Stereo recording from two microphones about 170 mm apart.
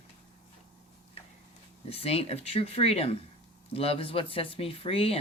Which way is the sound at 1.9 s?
35° left (ahead or behind).